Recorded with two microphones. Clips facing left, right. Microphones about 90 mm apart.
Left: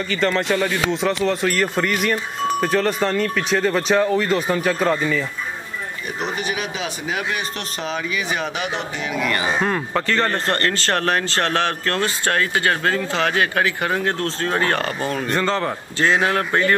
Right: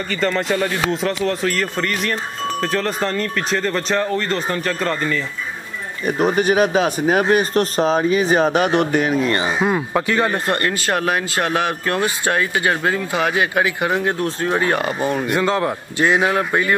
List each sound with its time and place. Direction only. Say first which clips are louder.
0.1 s speech: even; centre (ahead or behind)
6.0 s speech: right 10 dB; 45° right (ahead or behind)
9.2 s speech: right 3 dB; 30° right (ahead or behind)
9.5 s speech: right 2 dB; 10° right (ahead or behind)